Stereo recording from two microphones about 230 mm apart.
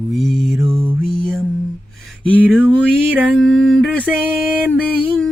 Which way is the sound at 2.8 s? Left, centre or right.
Centre.